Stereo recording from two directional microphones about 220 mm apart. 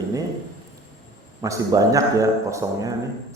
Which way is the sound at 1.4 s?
15° right (ahead or behind).